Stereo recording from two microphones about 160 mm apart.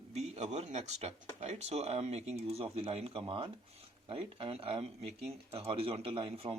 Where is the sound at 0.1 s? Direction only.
45° right (ahead or behind).